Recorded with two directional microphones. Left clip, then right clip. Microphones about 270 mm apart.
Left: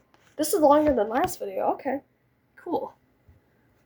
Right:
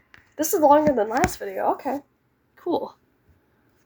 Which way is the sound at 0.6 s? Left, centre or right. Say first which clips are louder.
Right 3 dB; centre.